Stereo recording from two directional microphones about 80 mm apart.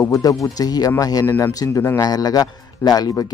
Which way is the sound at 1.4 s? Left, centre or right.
Left.